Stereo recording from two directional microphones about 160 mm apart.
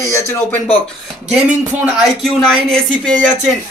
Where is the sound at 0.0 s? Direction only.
15° left (ahead or behind).